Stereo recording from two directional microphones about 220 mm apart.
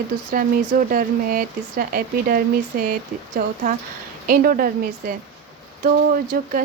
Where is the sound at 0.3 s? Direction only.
40° right (ahead or behind).